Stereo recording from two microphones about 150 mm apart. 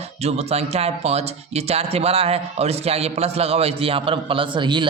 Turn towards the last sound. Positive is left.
turn(degrees=-30)  # may be behind; listen again after turning